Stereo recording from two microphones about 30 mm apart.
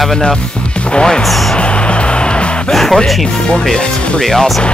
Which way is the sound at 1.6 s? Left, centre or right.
Left.